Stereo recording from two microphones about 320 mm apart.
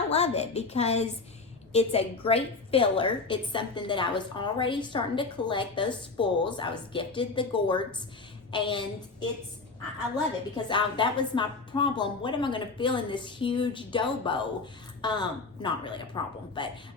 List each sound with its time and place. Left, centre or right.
0.1 s a woman's voice: centre
10.7 s a woman's voice: centre